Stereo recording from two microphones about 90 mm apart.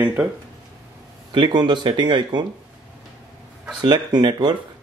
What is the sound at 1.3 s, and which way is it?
Speech, 60° right (ahead or behind).